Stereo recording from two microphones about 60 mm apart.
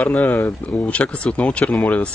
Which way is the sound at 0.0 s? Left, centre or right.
Left.